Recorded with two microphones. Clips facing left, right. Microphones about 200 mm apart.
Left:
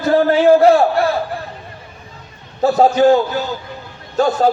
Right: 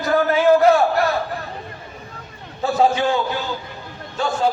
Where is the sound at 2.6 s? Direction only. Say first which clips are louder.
Left 6 dB; 40° left (ahead or behind).